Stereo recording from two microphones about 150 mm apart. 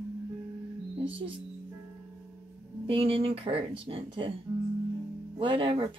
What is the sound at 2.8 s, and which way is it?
Speech, 35° right (ahead or behind).